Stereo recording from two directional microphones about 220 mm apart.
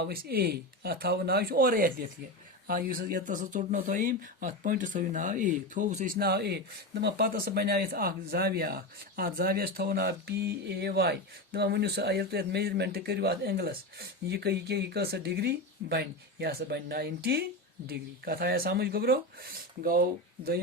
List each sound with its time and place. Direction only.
0.0 s speech: 45° right (ahead or behind)